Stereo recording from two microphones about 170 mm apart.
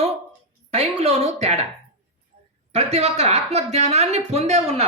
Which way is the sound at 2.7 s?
40° right (ahead or behind).